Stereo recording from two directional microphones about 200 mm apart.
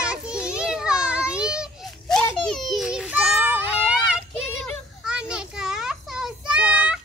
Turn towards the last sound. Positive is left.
turn(degrees=-5)  # may be behind; listen again after turning